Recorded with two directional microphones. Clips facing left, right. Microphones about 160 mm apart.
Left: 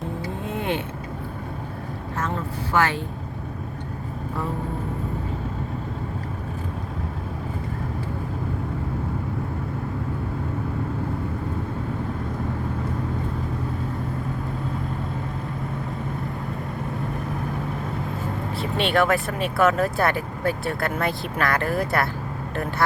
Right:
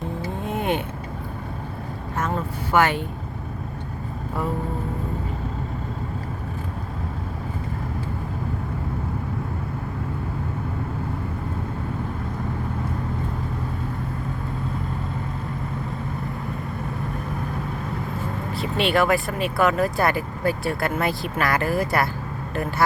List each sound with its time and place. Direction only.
2.7 s speech: 15° right (ahead or behind)
18.8 s speech: centre (ahead or behind)